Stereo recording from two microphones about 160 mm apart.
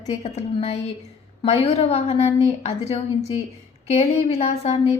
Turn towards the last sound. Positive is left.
turn(degrees=40)  # may be behind; listen again after turning